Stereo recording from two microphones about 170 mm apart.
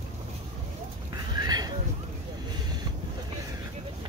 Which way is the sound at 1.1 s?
25° right (ahead or behind).